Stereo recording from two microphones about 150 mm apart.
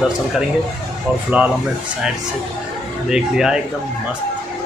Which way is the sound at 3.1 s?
5° right (ahead or behind).